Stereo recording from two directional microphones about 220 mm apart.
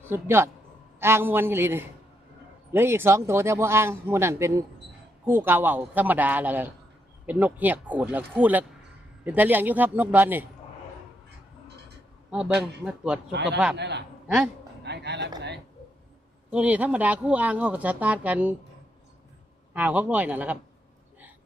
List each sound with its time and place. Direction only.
0.1 s speech: 10° right (ahead or behind)
12.3 s a man's voice: 5° right (ahead or behind)
13.3 s speech: 50° right (ahead or behind)
14.3 s a woman's voice: 5° right (ahead or behind)
14.8 s a sound: 50° right (ahead or behind)
16.5 s speech: 5° right (ahead or behind)
19.7 s speech: 5° right (ahead or behind)